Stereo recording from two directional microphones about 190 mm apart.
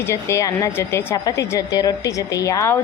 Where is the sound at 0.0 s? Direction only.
15° left (ahead or behind).